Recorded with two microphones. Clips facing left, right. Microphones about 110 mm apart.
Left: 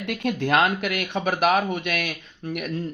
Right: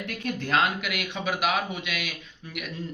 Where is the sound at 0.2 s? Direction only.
65° left (ahead or behind).